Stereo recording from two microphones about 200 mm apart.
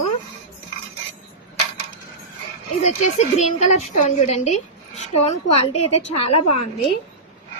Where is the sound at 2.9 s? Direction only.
35° left (ahead or behind).